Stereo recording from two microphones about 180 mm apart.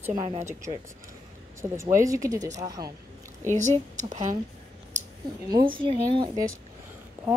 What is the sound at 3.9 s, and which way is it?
Speech, 45° right (ahead or behind).